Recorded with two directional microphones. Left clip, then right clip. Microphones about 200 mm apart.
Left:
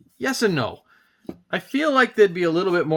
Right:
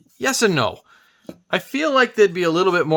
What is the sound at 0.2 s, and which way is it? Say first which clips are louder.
Speech: right 4 dB; 30° right (ahead or behind).